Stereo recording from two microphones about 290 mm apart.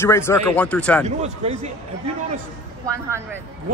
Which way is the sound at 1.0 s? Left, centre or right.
Right.